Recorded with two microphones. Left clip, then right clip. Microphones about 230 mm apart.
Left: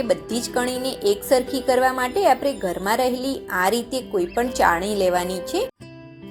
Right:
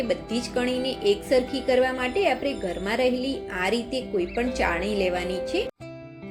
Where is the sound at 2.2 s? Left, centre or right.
Left.